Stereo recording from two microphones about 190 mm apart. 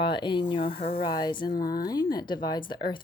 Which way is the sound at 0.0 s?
25° left (ahead or behind).